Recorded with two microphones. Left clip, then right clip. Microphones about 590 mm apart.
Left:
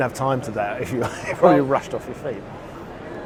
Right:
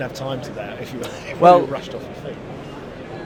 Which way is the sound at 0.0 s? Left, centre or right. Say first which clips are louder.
Left 5 dB; left.